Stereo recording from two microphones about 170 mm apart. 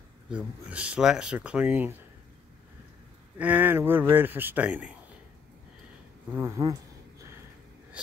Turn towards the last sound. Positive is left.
turn(degrees=-20)  # may be behind; listen again after turning